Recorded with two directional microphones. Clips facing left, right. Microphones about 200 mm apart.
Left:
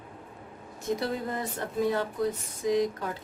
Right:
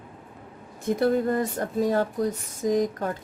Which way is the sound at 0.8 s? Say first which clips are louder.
Right 8 dB; 50° right (ahead or behind).